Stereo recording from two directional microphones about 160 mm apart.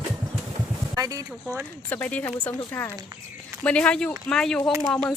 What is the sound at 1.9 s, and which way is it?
Speech, 10° left (ahead or behind).